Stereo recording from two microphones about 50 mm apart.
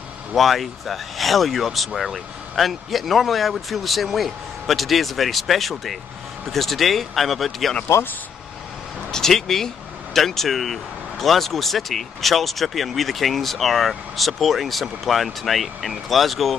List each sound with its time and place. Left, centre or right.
0.3 s speech: centre
7.9 s speech: left
9.1 s speech: centre